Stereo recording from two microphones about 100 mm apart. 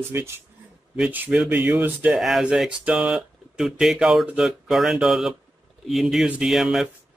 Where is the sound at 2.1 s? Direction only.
5° right (ahead or behind).